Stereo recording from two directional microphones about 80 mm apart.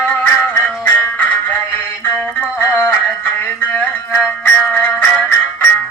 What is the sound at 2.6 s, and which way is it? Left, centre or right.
Music, left.